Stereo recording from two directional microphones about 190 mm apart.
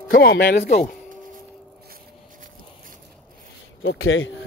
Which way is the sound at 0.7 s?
50° left (ahead or behind).